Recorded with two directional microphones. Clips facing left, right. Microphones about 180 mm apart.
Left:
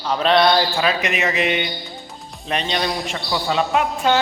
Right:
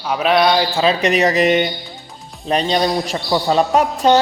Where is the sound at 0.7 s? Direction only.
30° right (ahead or behind).